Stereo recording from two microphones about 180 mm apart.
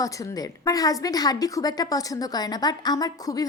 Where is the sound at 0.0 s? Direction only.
20° left (ahead or behind).